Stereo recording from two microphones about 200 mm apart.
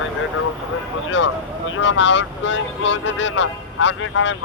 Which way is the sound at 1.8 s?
65° left (ahead or behind).